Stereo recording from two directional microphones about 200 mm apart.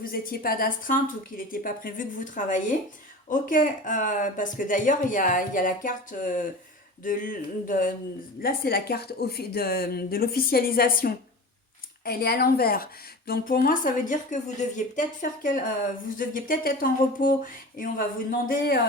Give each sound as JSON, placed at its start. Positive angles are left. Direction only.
{"t": 0.0, "sound": "speech", "side_deg": 45}